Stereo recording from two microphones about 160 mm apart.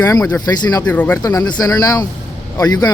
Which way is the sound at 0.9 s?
10° left (ahead or behind).